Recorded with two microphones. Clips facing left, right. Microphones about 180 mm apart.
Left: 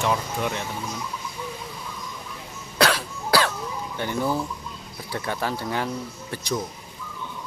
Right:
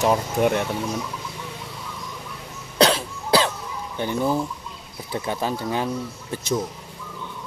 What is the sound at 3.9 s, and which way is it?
Speech, 15° right (ahead or behind).